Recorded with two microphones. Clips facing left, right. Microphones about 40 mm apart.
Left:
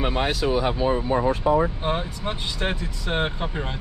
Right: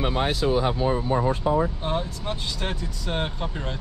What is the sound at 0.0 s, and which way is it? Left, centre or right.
Speech, left.